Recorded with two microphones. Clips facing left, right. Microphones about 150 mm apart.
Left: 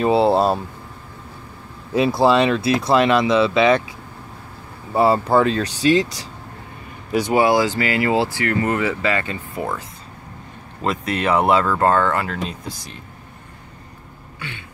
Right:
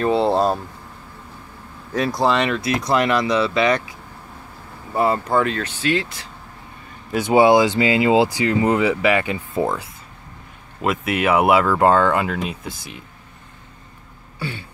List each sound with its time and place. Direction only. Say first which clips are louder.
0.0 s speech: left 2 dB; 5° left (ahead or behind)
2.4 s speech: left 3 dB; 30° left (ahead or behind)
4.9 s speech: left 3 dB; 30° left (ahead or behind)
7.2 s speech: right 4 dB; 20° right (ahead or behind)
10.8 s speech: right 1 dB; 5° right (ahead or behind)
12.6 s speech: even; centre (ahead or behind)
14.4 s throat clearing: right 6 dB; 35° right (ahead or behind)